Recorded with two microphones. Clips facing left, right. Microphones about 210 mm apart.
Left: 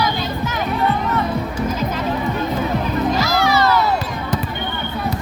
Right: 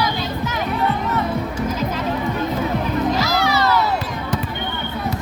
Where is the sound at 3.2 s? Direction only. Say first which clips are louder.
Left 2 dB; 50° left (ahead or behind).